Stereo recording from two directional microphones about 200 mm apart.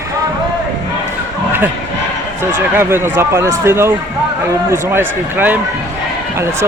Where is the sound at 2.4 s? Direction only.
10° right (ahead or behind).